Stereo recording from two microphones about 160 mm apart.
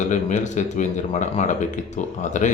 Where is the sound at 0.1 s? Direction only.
50° left (ahead or behind).